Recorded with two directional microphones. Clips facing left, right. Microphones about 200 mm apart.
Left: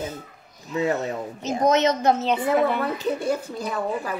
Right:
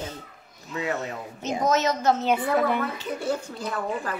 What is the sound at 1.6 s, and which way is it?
Speech, 20° left (ahead or behind).